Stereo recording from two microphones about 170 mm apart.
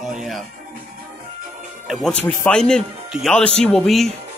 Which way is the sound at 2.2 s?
10° left (ahead or behind).